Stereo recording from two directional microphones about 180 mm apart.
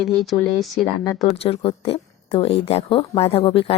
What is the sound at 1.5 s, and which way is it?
Speech, 30° left (ahead or behind).